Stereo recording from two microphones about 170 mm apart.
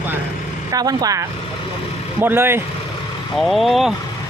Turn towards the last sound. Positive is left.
turn(degrees=0)  # may be behind; listen again after turning